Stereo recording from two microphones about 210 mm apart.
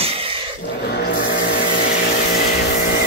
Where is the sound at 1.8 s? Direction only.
45° left (ahead or behind).